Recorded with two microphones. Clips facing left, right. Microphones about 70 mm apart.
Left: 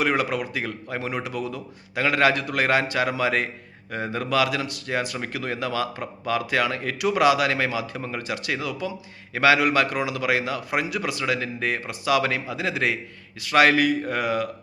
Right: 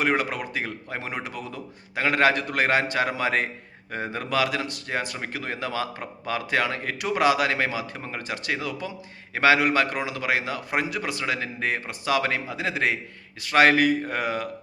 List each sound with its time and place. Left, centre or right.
0.0 s speech: right